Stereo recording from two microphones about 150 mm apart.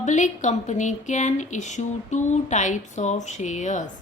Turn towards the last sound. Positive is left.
turn(degrees=55)  # may be behind; listen again after turning